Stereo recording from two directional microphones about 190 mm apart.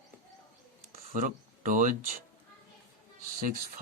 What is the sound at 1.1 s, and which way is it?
Speech, 45° right (ahead or behind).